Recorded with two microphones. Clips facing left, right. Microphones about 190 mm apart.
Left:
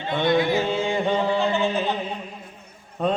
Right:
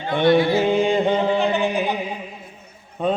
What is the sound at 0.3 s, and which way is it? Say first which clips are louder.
Music: right 4 dB; 20° left (ahead or behind).